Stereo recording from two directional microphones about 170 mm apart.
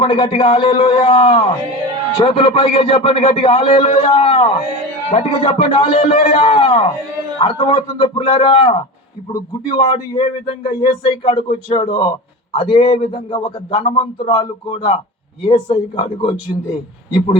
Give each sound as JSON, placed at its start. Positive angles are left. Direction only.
{"t": 0.0, "sound": "speech", "side_deg": 30}